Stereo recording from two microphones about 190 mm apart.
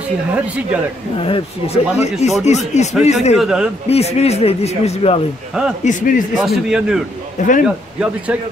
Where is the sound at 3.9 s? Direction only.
35° left (ahead or behind).